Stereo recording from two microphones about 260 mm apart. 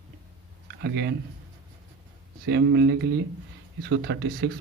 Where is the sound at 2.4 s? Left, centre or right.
Right.